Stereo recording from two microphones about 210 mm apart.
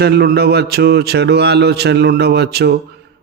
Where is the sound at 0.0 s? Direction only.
50° right (ahead or behind).